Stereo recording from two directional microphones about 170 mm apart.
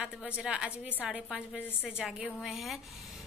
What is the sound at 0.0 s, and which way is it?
A woman's voice, 5° right (ahead or behind).